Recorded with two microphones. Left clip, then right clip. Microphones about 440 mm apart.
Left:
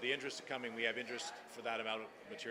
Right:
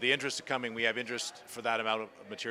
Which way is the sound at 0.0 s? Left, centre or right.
Right.